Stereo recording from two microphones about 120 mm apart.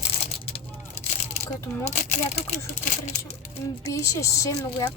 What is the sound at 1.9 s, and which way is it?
Speech, 70° left (ahead or behind).